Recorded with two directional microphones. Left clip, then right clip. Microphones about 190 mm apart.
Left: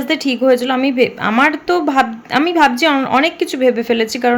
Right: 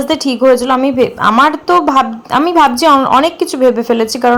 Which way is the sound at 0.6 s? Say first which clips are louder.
Right 3 dB; 5° left (ahead or behind).